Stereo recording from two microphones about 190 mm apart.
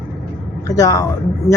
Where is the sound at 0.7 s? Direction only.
20° left (ahead or behind).